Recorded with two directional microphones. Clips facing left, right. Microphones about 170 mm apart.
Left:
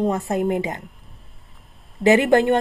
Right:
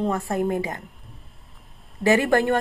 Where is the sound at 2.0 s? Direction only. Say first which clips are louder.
Left 4 dB; 20° left (ahead or behind).